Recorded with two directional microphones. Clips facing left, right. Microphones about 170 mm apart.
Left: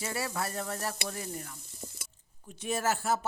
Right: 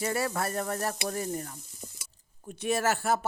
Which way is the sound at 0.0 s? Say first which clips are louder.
Right 5 dB; 50° right (ahead or behind).